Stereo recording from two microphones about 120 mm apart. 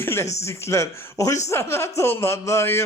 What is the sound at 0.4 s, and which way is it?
Speech, 25° left (ahead or behind).